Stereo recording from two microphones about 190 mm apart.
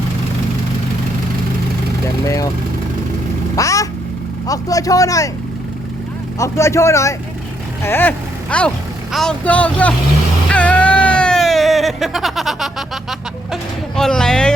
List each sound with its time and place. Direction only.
2.2 s speech: 15° left (ahead or behind)
3.5 s vehicle: 15° left (ahead or behind)
4.4 s speech: 20° left (ahead or behind)
6.4 s speech: 15° left (ahead or behind)
10.5 s a sound: 5° left (ahead or behind)